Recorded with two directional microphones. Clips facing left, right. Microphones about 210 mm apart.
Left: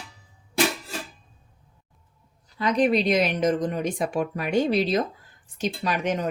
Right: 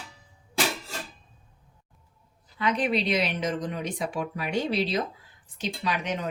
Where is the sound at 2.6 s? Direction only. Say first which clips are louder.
Left 5 dB; 40° left (ahead or behind).